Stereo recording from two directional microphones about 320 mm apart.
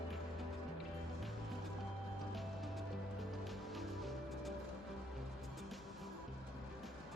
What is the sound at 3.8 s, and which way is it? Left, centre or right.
Music, centre.